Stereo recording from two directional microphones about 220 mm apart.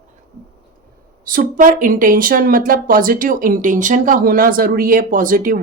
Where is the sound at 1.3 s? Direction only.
40° right (ahead or behind).